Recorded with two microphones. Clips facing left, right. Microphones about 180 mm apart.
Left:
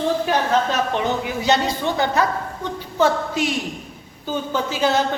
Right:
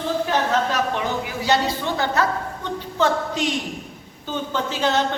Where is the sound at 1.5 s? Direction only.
20° left (ahead or behind).